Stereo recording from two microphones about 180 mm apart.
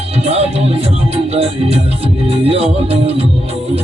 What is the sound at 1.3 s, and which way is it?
Music, 35° right (ahead or behind).